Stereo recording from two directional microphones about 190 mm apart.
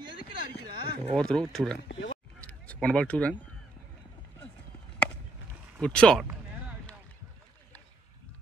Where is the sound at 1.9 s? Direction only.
75° left (ahead or behind).